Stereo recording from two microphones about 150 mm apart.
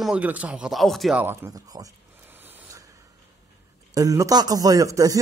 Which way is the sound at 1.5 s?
25° right (ahead or behind).